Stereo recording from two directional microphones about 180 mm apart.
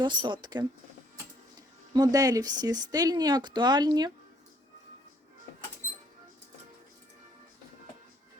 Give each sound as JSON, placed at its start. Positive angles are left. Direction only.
{"t": 0.0, "sound": "speech", "side_deg": -25}
{"t": 1.9, "sound": "speech", "side_deg": -20}